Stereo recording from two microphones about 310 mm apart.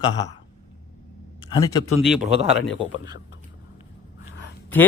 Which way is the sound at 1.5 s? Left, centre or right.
Centre.